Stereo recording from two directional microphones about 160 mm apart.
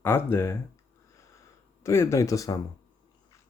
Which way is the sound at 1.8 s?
15° left (ahead or behind).